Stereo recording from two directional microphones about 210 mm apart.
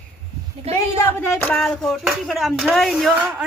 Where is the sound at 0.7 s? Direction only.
30° right (ahead or behind).